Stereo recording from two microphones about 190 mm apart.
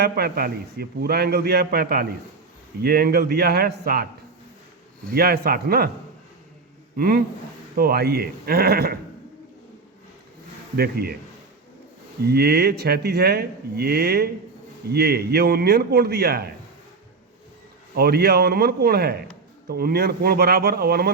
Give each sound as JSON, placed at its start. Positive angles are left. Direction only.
{"t": 0.0, "sound": "a man's voice", "side_deg": -55}
{"t": 5.1, "sound": "speech", "side_deg": -55}
{"t": 6.9, "sound": "speech", "side_deg": -50}
{"t": 10.8, "sound": "a man's voice", "side_deg": -55}
{"t": 12.3, "sound": "a man's voice", "side_deg": -55}
{"t": 17.9, "sound": "a man's voice", "side_deg": -55}